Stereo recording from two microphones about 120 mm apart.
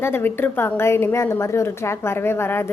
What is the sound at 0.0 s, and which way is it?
A woman's voice, 20° left (ahead or behind).